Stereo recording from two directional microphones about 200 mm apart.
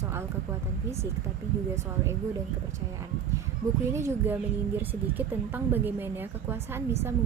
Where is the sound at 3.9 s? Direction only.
15° right (ahead or behind).